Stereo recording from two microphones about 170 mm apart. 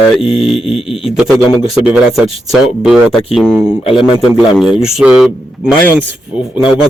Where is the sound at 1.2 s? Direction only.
Centre (ahead or behind).